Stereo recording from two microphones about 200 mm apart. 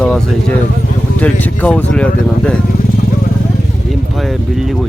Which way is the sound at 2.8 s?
45° left (ahead or behind).